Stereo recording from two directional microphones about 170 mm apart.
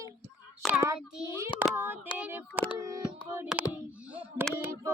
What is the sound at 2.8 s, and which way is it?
Hands, 20° right (ahead or behind).